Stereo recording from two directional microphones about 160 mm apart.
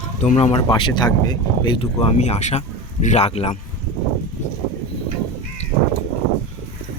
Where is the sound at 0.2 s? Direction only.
45° left (ahead or behind).